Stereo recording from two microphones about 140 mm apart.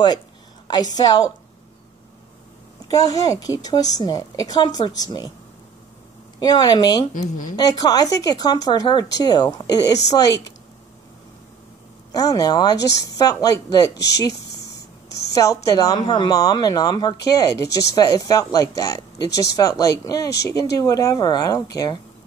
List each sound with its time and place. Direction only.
0.9 s a woman's voice: 30° left (ahead or behind)
2.9 s a woman's voice: 25° left (ahead or behind)
6.4 s a woman's voice: 30° left (ahead or behind)
7.2 s speech: 70° left (ahead or behind)
7.5 s a woman's voice: 30° left (ahead or behind)
12.1 s a woman's voice: 25° left (ahead or behind)
15.3 s a woman's voice: 25° left (ahead or behind)